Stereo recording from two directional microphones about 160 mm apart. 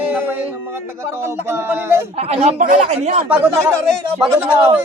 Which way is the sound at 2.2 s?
40° right (ahead or behind).